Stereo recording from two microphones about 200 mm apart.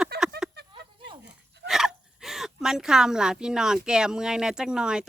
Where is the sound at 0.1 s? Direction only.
50° right (ahead or behind).